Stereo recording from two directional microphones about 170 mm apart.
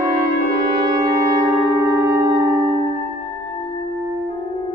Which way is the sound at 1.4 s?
20° right (ahead or behind).